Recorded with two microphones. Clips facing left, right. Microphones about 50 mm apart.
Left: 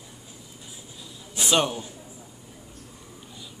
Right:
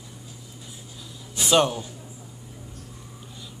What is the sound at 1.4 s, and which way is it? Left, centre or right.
Speech, centre.